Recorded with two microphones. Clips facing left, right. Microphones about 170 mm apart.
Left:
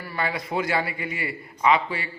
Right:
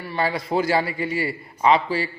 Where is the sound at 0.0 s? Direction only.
30° right (ahead or behind).